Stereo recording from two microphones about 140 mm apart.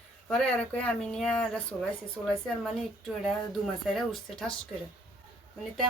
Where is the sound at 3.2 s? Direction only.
Centre (ahead or behind).